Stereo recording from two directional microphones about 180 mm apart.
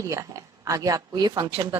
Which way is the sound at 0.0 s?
15° right (ahead or behind).